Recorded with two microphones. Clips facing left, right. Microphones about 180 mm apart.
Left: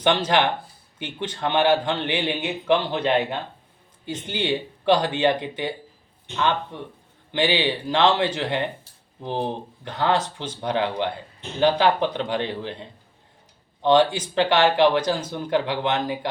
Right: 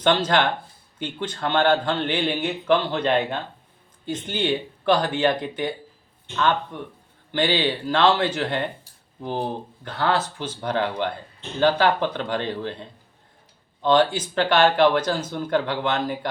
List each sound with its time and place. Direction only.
0.0 s speech: 15° left (ahead or behind)